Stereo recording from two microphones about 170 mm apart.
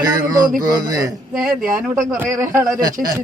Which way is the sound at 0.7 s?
20° right (ahead or behind).